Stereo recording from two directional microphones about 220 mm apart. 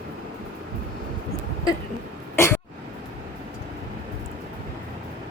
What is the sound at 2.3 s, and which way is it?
Cough, 10° left (ahead or behind).